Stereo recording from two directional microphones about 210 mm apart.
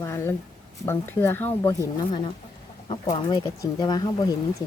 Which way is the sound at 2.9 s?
20° left (ahead or behind).